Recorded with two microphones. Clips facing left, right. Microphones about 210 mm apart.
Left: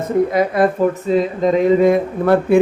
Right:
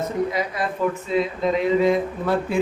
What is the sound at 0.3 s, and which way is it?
Speech, 55° left (ahead or behind).